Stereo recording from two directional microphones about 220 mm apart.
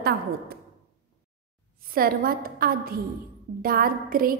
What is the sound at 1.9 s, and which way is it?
A woman's voice, 40° right (ahead or behind).